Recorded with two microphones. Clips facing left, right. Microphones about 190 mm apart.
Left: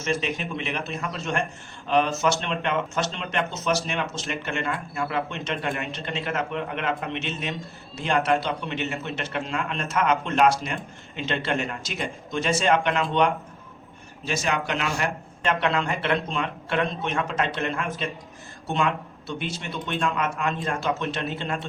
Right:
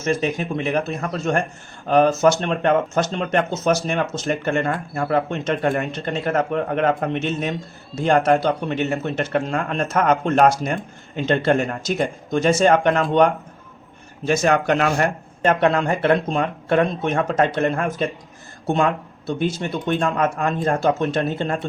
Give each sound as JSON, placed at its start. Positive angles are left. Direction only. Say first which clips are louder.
{"t": 0.0, "sound": "speech", "louder": "right 6 dB", "side_deg": -45}